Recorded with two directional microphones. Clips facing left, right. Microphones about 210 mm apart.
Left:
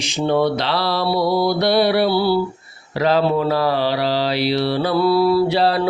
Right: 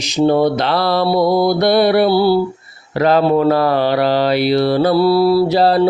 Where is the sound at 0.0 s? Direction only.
40° right (ahead or behind).